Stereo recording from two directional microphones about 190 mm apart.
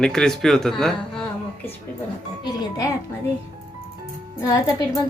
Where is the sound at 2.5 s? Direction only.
20° left (ahead or behind).